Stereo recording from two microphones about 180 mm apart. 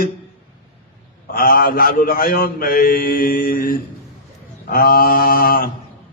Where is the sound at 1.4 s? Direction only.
55° left (ahead or behind).